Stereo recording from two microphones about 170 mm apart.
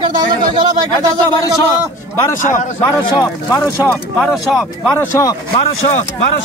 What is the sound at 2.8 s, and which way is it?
Speech, 20° left (ahead or behind).